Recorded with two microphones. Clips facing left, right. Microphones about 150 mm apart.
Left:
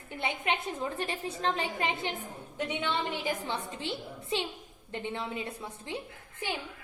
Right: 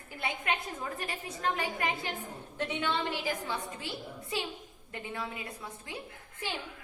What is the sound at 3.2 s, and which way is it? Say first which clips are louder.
A woman's voice: left 1 dB; 25° left (ahead or behind).